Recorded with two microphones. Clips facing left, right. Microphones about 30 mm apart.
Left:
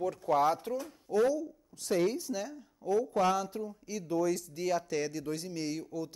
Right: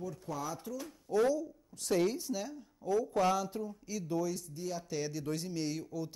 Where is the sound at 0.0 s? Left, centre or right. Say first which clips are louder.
Left 11 dB; left.